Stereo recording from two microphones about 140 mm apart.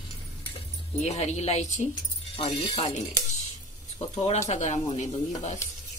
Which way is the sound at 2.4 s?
35° left (ahead or behind).